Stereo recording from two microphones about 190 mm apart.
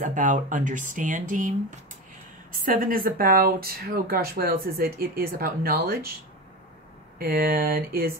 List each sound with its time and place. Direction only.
0.0 s speech: 45° right (ahead or behind)
2.6 s speech: 50° right (ahead or behind)
7.2 s speech: 50° right (ahead or behind)